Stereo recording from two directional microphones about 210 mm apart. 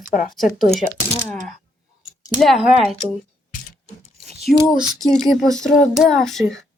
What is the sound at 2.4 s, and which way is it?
Speech, centre (ahead or behind).